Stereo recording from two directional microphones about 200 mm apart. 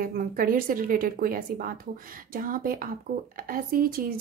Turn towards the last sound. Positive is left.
turn(degrees=-45)  # may be behind; listen again after turning